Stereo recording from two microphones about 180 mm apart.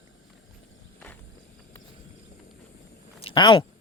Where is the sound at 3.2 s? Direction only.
30° left (ahead or behind).